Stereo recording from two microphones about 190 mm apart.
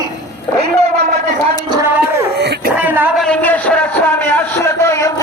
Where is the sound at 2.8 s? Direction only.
10° right (ahead or behind).